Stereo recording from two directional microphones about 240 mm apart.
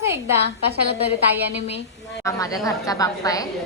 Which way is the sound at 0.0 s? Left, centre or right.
Centre.